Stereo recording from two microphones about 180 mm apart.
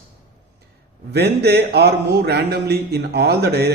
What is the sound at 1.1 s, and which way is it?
A man's voice, 65° right (ahead or behind).